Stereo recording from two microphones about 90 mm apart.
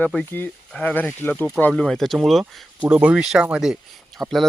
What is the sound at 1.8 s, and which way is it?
Speech, 5° left (ahead or behind).